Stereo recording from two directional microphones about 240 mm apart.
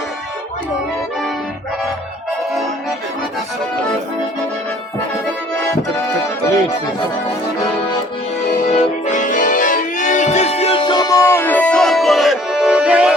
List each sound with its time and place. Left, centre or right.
8.6 s music: left; by 13.1 s centre